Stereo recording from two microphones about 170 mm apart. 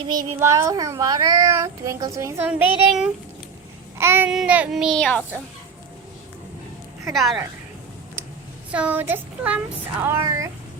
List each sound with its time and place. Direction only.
0.3 s speech: 20° right (ahead or behind)
3.9 s babbling: 15° right (ahead or behind)
4.3 s speech: 5° right (ahead or behind)
7.1 s speech: centre (ahead or behind)
8.7 s speech: 10° right (ahead or behind)